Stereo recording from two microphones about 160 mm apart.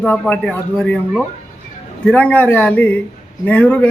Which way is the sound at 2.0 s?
10° left (ahead or behind).